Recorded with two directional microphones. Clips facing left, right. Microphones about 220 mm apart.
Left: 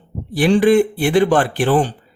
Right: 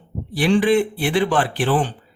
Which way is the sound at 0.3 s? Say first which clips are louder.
Left 4 dB; 45° left (ahead or behind).